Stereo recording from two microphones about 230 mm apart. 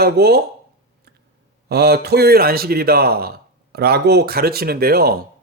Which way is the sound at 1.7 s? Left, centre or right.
Right.